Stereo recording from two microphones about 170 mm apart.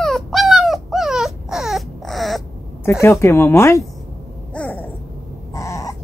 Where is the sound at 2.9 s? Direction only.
15° left (ahead or behind).